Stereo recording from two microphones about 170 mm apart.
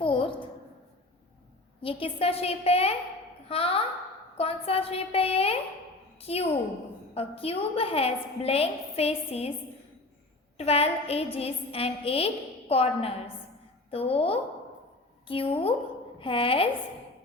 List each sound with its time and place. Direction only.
0.0 s a sound: 30° left (ahead or behind)
1.8 s a woman's voice: 30° left (ahead or behind)
10.6 s a woman's voice: 35° left (ahead or behind)